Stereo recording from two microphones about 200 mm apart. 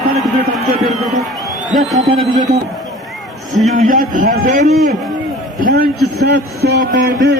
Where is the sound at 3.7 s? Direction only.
40° right (ahead or behind).